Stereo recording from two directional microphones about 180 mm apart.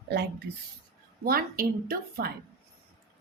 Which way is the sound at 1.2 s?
55° right (ahead or behind).